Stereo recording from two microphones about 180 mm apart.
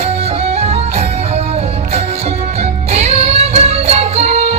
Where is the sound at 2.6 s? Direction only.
35° right (ahead or behind).